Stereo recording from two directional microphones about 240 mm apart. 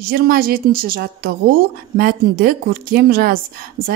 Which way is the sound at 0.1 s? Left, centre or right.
Right.